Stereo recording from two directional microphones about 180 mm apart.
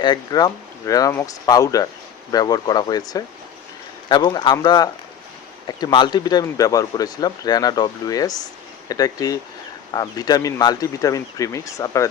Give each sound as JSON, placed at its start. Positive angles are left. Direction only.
{"t": 0.0, "sound": "speech", "side_deg": 25}